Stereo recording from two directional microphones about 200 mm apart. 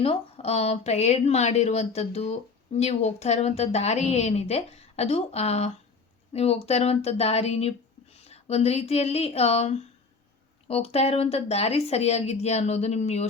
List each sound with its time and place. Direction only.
0.0 s speech: 30° left (ahead or behind)